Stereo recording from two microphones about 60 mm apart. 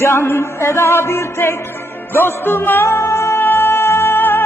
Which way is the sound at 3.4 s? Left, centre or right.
Left.